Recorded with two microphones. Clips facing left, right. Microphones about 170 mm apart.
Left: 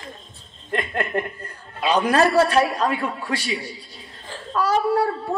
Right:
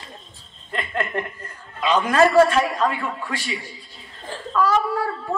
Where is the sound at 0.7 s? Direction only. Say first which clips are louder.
Left 2 dB; 35° left (ahead or behind).